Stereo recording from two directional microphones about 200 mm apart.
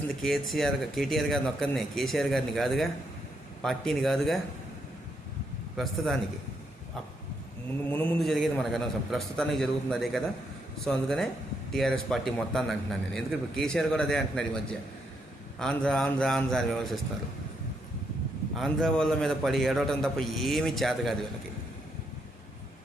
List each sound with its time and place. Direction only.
0.2 s a man's voice: centre (ahead or behind)
5.7 s a man's voice: centre (ahead or behind)
7.9 s a man's voice: 5° left (ahead or behind)
18.5 s a man's voice: centre (ahead or behind)